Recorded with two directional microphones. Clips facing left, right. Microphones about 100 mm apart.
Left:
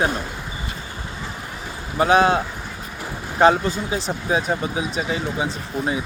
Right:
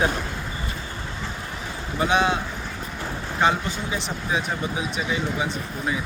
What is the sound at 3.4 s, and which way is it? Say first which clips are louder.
Speech: left 7 dB; 40° left (ahead or behind).